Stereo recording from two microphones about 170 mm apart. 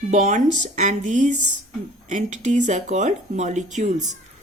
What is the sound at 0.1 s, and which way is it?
Speech, 45° right (ahead or behind).